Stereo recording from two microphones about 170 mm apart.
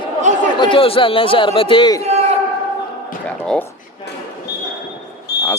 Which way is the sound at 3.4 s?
10° left (ahead or behind).